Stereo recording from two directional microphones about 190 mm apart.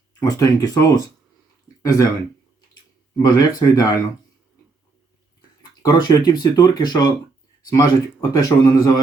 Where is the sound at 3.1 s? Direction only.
20° left (ahead or behind).